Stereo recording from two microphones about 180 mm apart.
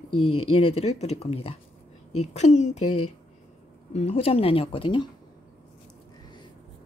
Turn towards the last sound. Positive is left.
turn(degrees=30)  # may be behind; listen again after turning